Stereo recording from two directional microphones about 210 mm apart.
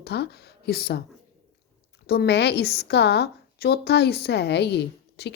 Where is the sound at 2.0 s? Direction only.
50° left (ahead or behind).